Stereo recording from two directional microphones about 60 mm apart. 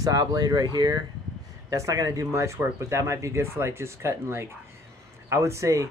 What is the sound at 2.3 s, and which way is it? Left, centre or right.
Speech, right.